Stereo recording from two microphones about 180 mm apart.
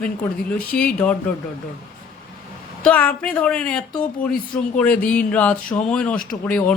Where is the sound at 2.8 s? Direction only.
10° left (ahead or behind).